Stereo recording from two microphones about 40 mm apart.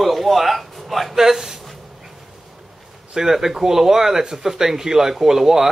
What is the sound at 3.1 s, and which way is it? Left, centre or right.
Speech, centre.